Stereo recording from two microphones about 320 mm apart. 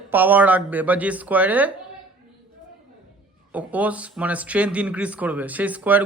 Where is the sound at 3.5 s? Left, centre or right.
Centre.